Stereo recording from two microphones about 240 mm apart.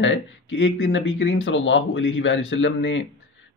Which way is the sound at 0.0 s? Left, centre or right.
Left.